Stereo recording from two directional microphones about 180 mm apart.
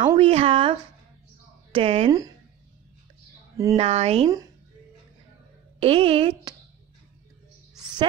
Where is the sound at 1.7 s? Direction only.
35° right (ahead or behind).